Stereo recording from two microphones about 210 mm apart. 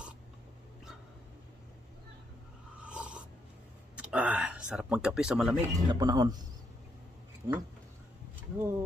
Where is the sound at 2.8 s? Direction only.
5° right (ahead or behind).